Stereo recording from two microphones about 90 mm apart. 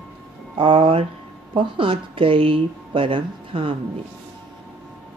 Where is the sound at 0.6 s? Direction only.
85° right.